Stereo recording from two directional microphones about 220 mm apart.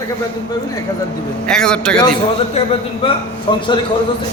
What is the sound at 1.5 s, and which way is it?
Speech, 5° left (ahead or behind).